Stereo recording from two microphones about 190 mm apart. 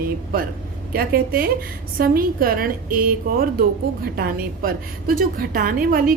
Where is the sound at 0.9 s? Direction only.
50° right (ahead or behind).